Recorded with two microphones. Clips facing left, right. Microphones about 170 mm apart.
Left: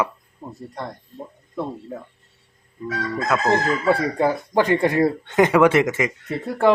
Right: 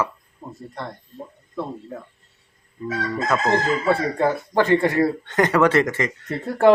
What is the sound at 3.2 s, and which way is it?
Chicken, centre (ahead or behind).